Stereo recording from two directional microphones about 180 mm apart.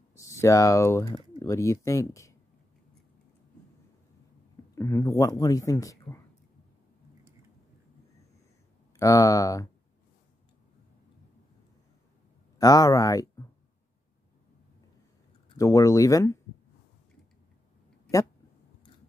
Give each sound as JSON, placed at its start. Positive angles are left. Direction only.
{"t": 0.2, "sound": "speech", "side_deg": 15}
{"t": 4.7, "sound": "speech", "side_deg": 15}
{"t": 8.9, "sound": "speech", "side_deg": 20}
{"t": 12.5, "sound": "speech", "side_deg": 20}
{"t": 15.5, "sound": "speech", "side_deg": 20}